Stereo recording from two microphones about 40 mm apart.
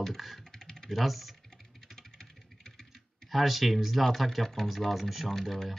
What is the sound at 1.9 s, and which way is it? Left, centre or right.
Computer keyboard, centre.